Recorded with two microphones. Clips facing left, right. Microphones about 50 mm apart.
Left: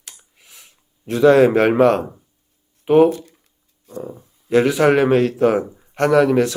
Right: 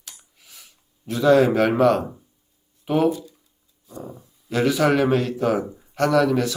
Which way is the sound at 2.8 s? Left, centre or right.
Left.